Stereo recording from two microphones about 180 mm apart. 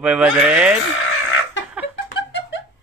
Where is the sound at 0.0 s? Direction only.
5° right (ahead or behind).